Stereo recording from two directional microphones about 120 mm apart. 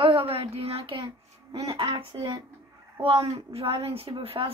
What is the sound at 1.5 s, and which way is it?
A woman's voice, 35° right (ahead or behind).